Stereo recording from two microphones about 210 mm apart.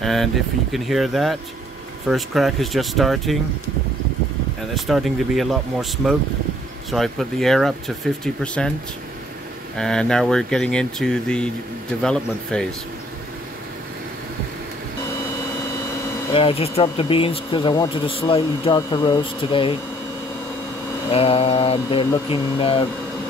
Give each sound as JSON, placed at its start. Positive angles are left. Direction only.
{"t": 0.0, "sound": "speech", "side_deg": 0}
{"t": 4.7, "sound": "speech", "side_deg": 0}
{"t": 9.8, "sound": "speech", "side_deg": 5}
{"t": 16.3, "sound": "speech", "side_deg": 25}
{"t": 21.1, "sound": "speech", "side_deg": 30}